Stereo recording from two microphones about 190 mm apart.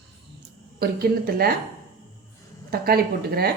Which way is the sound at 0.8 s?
55° right (ahead or behind).